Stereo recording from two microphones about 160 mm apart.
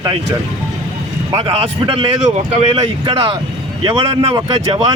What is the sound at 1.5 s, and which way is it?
Speech, 35° right (ahead or behind).